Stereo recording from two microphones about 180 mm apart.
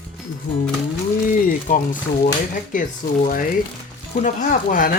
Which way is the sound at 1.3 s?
50° left (ahead or behind).